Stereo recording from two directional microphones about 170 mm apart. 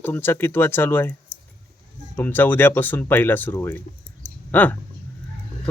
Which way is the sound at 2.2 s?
10° left (ahead or behind).